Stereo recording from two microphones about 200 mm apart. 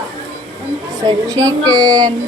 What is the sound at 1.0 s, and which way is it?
Speech, 15° right (ahead or behind).